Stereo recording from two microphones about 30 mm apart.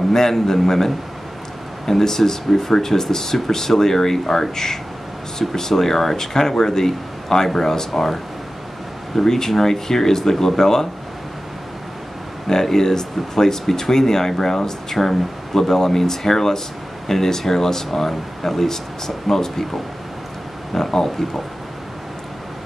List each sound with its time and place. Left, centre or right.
0.1 s speech: centre
12.4 s speech: centre